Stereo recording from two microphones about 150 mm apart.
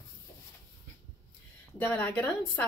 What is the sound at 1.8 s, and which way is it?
Speech, 15° left (ahead or behind).